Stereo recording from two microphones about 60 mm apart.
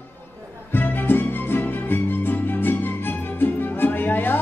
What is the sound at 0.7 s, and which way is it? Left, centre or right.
Music, left.